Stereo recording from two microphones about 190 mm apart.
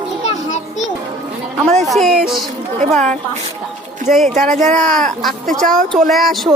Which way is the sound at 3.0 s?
40° right (ahead or behind).